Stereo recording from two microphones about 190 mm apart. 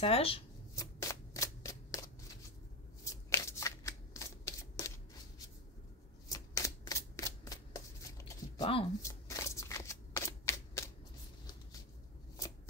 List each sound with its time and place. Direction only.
0.0 s speech: 30° left (ahead or behind)
0.7 s shuffling cards: 20° left (ahead or behind)
3.1 s shuffling cards: 15° left (ahead or behind)
6.2 s shuffling cards: 15° left (ahead or behind)
8.5 s speech: 30° left (ahead or behind)
9.0 s shuffling cards: 15° left (ahead or behind)